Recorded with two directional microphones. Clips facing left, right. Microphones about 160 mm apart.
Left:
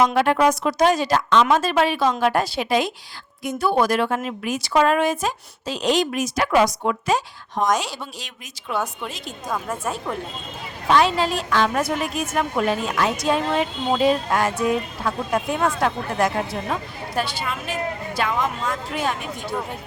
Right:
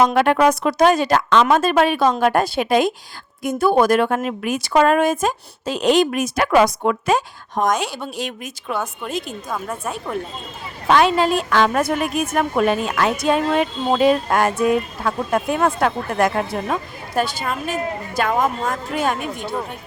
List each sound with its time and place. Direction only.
0.0 s a woman's voice: 55° right (ahead or behind)
9.5 s a woman's voice: centre (ahead or behind)
10.8 s speech: 55° right (ahead or behind)
17.2 s a woman's voice: 45° right (ahead or behind)